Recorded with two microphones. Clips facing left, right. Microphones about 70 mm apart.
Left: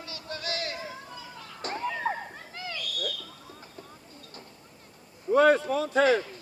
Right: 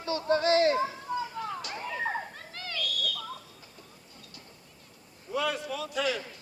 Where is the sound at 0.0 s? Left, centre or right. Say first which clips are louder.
Right 11 dB; right.